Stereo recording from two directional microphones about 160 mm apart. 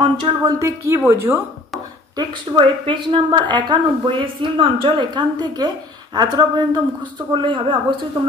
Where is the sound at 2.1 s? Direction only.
25° right (ahead or behind).